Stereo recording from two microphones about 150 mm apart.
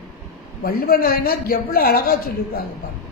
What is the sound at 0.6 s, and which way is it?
A woman's voice, 90° left.